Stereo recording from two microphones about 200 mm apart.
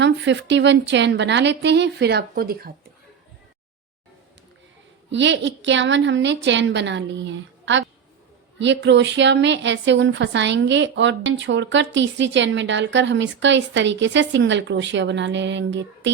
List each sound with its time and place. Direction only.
0.0 s a woman's voice: 65° right (ahead or behind)
5.1 s a woman's voice: 65° right (ahead or behind)